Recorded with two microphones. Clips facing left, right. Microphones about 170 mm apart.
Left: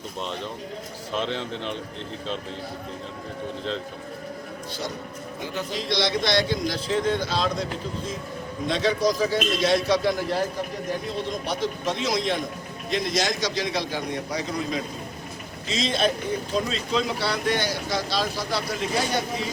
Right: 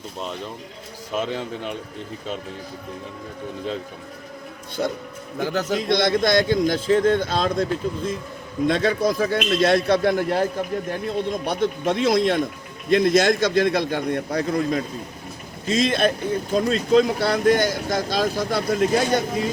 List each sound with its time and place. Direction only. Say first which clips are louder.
1.1 s a man's voice: right 2 dB; 10° right (ahead or behind)
4.8 s a man's voice: right 9 dB; 60° right (ahead or behind)
5.4 s a man's voice: right 8 dB; 90° right
5.7 s a man's voice: right 5 dB; 55° right (ahead or behind)